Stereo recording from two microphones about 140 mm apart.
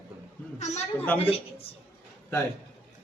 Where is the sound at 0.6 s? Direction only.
50° left (ahead or behind).